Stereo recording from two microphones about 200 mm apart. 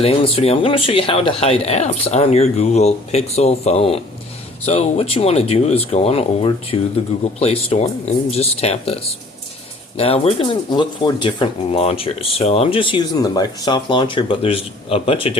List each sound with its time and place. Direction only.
0.0 s speech: 30° left (ahead or behind)